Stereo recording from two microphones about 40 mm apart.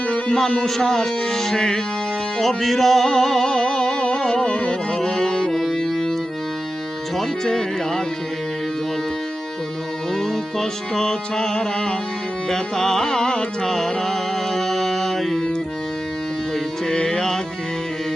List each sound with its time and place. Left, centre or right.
0.3 s speech: centre
2.4 s music: centre
4.4 s music: left
4.7 s music: centre
7.4 s speech: centre
10.1 s music: centre
12.5 s speech: centre
13.7 s music: centre
16.8 s music: centre